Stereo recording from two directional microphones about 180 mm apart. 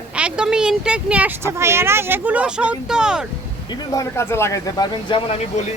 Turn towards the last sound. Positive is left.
turn(degrees=25)  # may be behind; listen again after turning